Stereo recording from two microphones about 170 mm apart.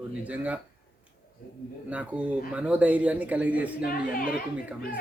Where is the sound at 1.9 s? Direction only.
10° right (ahead or behind).